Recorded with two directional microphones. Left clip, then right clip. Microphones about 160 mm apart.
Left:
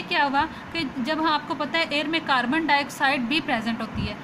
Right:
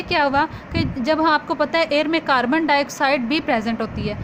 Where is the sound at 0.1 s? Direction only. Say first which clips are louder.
Right 4 dB; 60° right (ahead or behind).